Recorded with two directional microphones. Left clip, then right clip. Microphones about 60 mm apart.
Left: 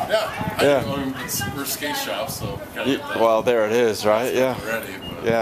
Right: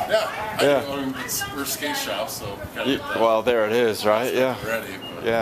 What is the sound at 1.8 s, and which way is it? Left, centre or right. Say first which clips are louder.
Speech: left 1 dB; centre.